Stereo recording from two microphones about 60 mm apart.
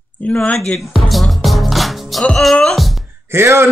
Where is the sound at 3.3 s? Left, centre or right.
Right.